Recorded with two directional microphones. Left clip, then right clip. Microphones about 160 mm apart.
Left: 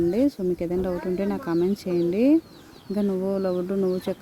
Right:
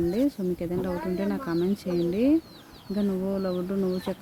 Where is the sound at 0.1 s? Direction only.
15° left (ahead or behind).